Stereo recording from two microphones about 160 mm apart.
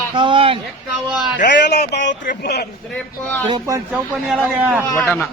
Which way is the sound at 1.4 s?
90° left.